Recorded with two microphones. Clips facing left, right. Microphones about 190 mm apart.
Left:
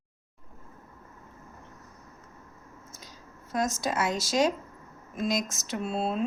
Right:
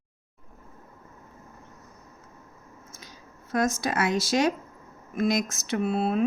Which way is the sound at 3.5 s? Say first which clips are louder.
Right 3 dB; 60° right (ahead or behind).